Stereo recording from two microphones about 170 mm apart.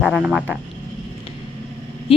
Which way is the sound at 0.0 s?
5° right (ahead or behind).